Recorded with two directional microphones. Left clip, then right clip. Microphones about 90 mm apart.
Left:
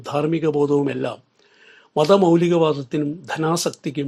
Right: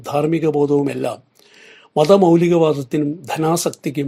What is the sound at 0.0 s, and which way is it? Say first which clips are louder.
A man's voice: right 3 dB; 30° right (ahead or behind).